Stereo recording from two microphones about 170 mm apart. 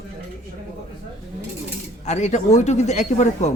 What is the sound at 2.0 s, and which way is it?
Speech, 45° left (ahead or behind).